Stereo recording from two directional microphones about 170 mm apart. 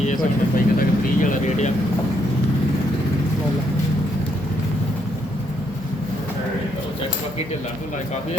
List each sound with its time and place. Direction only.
0.0 s vehicle: 50° left (ahead or behind)